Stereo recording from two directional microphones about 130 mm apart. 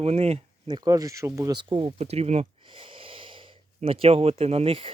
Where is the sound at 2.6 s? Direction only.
40° right (ahead or behind).